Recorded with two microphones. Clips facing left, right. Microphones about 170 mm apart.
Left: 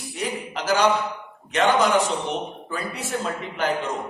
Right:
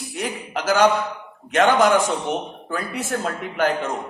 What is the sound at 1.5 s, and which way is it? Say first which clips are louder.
A man's voice: right 3 dB; 50° right (ahead or behind).